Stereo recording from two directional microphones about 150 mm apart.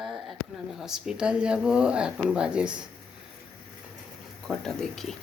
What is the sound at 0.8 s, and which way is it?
Speech, 5° right (ahead or behind).